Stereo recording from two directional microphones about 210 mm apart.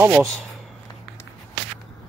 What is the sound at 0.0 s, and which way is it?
Speech, 5° right (ahead or behind).